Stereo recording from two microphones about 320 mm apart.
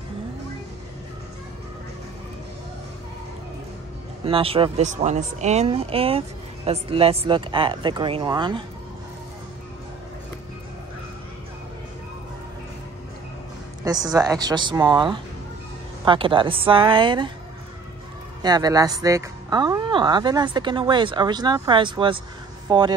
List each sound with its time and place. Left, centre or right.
4.3 s speech: centre
13.8 s speech: centre
18.4 s speech: centre